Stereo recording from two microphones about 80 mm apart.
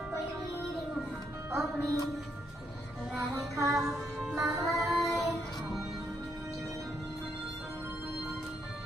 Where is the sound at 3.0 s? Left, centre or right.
Centre.